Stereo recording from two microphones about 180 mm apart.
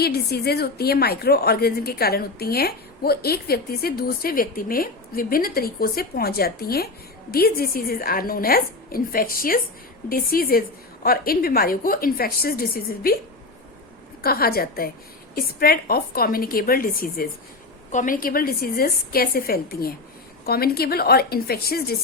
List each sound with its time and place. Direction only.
0.0 s a woman's voice: 60° left (ahead or behind)
14.2 s a woman's voice: 55° left (ahead or behind)